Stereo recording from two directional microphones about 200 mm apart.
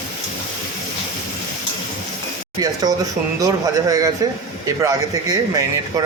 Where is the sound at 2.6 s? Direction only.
20° right (ahead or behind).